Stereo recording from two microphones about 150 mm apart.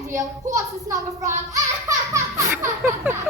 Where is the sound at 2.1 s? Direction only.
20° right (ahead or behind).